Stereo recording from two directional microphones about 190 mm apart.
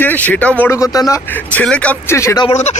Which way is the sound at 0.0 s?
10° left (ahead or behind).